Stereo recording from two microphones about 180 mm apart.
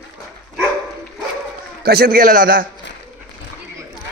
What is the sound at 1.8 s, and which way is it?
Speech, 60° right (ahead or behind).